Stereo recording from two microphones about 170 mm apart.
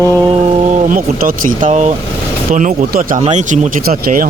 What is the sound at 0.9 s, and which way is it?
Speech, 55° right (ahead or behind).